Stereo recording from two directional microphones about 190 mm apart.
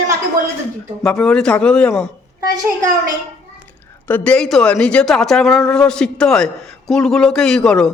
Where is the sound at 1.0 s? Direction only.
5° left (ahead or behind).